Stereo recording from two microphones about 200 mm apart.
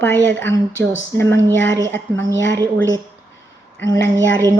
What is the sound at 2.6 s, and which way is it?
Speech, 15° right (ahead or behind).